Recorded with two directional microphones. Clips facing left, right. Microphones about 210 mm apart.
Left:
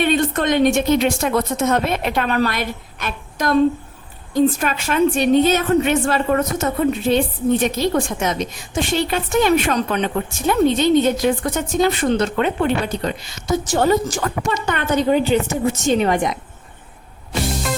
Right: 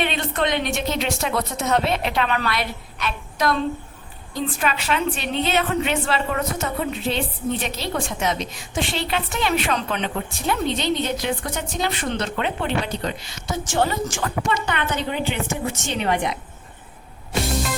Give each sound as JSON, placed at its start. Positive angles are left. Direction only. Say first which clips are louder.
{"t": 0.0, "sound": "a woman's voice", "louder": "left 6 dB", "side_deg": 45}